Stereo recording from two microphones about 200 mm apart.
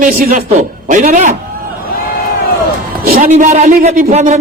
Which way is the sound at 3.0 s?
45° right (ahead or behind).